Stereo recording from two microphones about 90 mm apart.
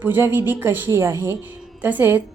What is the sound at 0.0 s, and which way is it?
A woman's voice, 25° right (ahead or behind).